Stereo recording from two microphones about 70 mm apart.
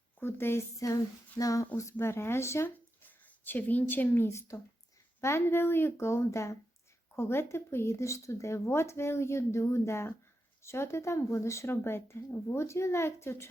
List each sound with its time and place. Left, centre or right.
0.2 s speech: left
0.8 s speech: left
1.7 s speech: left
2.6 s a sound: left
4.3 s speech: left
12.5 s speech: left